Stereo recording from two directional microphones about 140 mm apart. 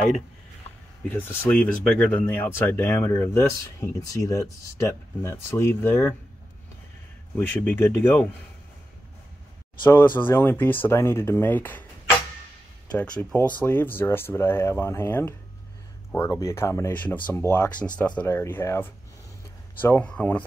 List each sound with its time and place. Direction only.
1.0 s speech: 15° left (ahead or behind)
7.3 s speech: 15° left (ahead or behind)
9.8 s speech: 15° left (ahead or behind)
12.9 s speech: 10° left (ahead or behind)